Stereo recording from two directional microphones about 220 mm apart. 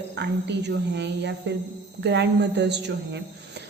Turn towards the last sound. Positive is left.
turn(degrees=-50)  # may be behind; listen again after turning